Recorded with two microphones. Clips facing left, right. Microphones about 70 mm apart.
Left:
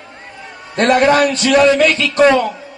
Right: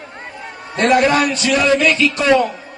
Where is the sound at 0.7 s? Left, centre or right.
Left.